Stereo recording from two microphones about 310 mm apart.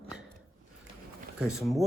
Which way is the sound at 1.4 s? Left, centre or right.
Centre.